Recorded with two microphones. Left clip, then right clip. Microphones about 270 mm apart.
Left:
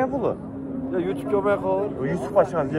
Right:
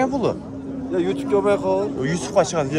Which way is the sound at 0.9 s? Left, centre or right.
Right.